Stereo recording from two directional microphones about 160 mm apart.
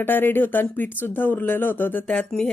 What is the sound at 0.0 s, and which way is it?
Speech, 15° left (ahead or behind).